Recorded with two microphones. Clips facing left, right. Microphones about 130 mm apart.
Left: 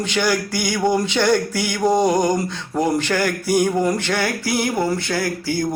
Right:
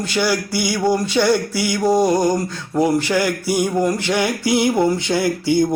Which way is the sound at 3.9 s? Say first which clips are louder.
Right 2 dB; 15° right (ahead or behind).